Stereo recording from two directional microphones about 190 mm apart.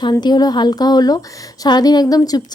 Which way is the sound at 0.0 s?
20° left (ahead or behind).